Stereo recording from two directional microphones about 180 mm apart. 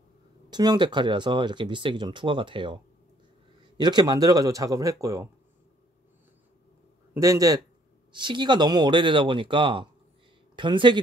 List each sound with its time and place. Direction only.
0.5 s speech: 25° right (ahead or behind)
3.8 s speech: 25° right (ahead or behind)
7.2 s speech: 20° right (ahead or behind)